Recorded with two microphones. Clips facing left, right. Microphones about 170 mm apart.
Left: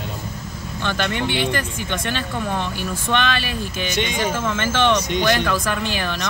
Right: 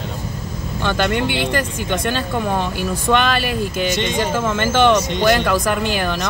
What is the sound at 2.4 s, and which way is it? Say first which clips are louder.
Speech: right 3 dB; 45° right (ahead or behind).